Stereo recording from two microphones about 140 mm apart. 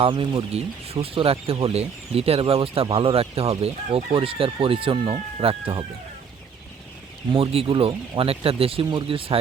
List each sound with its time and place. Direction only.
0.0 s speech: 40° right (ahead or behind)
7.3 s speech: 40° right (ahead or behind)